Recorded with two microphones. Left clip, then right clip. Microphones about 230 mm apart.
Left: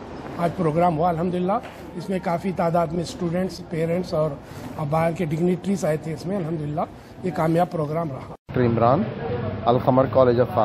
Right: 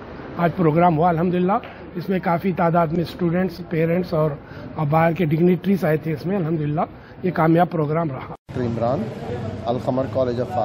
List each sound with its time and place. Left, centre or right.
0.4 s a man's voice: right
8.5 s a man's voice: left